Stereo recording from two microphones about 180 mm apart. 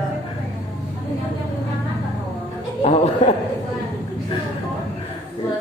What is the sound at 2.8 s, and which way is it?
Chuckle, 35° left (ahead or behind).